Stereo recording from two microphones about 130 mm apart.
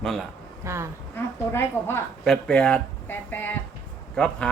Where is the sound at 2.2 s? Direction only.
5° left (ahead or behind).